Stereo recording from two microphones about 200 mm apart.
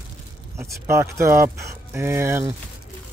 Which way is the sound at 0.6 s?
15° right (ahead or behind).